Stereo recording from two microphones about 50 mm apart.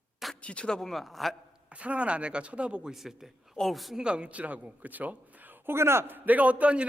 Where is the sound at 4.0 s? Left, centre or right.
Right.